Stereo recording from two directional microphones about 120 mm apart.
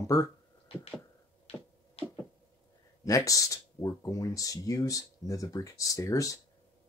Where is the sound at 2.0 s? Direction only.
55° left (ahead or behind).